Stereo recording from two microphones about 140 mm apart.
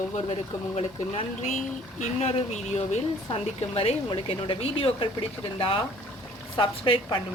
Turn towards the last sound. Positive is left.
turn(degrees=35)  # may be behind; listen again after turning